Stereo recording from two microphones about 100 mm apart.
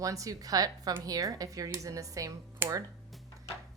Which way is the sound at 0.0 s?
35° right (ahead or behind).